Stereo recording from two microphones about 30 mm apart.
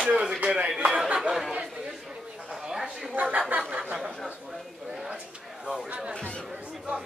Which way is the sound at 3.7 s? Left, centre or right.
Right.